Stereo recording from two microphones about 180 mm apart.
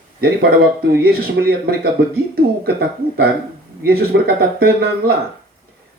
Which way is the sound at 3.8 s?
60° right (ahead or behind).